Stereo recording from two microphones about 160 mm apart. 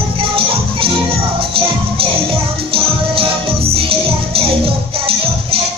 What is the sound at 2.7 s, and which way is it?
Music, 35° right (ahead or behind).